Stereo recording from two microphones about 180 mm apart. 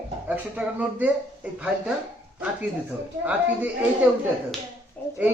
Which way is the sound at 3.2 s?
5° right (ahead or behind).